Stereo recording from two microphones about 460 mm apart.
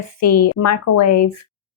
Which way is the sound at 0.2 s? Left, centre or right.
Left.